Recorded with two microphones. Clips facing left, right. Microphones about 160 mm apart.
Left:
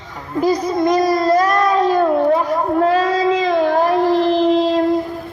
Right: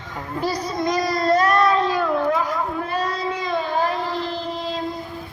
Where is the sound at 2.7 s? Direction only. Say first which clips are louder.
Left 10 dB; 75° left (ahead or behind).